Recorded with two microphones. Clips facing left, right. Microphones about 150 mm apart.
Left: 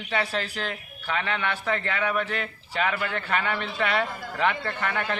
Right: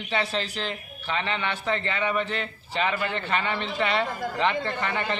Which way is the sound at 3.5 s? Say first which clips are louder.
Right 1 dB; 25° right (ahead or behind).